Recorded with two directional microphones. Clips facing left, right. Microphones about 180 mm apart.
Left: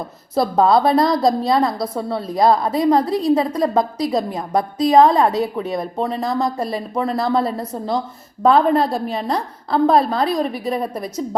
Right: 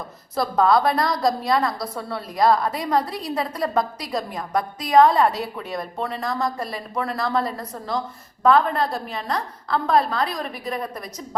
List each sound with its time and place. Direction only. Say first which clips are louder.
0.3 s a woman's voice: left 4 dB; 30° left (ahead or behind)